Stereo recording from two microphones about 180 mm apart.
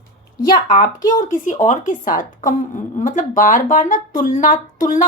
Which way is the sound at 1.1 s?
45° left (ahead or behind).